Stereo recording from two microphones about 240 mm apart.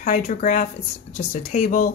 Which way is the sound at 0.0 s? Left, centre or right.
Left.